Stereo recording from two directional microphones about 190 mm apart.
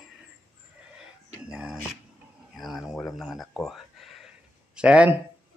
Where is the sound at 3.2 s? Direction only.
Centre (ahead or behind).